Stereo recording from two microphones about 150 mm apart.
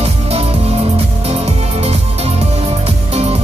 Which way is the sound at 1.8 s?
45° right (ahead or behind).